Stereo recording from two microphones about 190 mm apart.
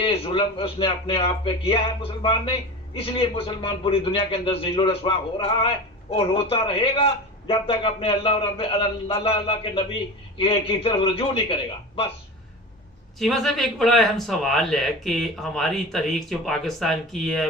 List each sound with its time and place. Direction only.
0.0 s speech: 25° left (ahead or behind)
13.1 s speech: centre (ahead or behind)